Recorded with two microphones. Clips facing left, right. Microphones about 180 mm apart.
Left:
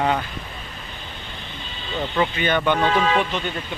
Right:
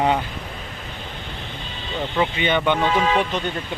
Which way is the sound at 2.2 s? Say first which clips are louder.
Even; 5° right (ahead or behind).